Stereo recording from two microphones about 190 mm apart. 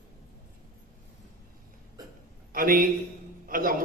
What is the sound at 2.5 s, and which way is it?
A man's voice, 50° right (ahead or behind).